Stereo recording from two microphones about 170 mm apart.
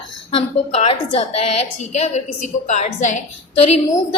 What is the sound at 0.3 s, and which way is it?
A woman's voice, 35° left (ahead or behind).